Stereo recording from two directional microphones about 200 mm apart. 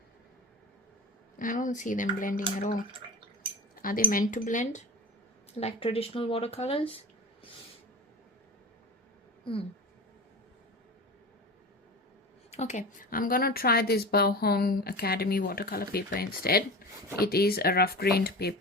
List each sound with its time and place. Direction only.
1.4 s speech: 40° left (ahead or behind)
3.8 s speech: 45° left (ahead or behind); by 7.0 s 30° left (ahead or behind)
9.4 s speech: 25° left (ahead or behind)
12.5 s a woman's voice: 35° left (ahead or behind); by 18.5 s 50° left (ahead or behind)